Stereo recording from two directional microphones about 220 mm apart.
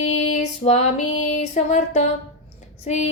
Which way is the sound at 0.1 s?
30° left (ahead or behind).